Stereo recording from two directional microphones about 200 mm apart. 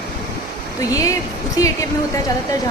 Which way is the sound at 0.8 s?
15° left (ahead or behind).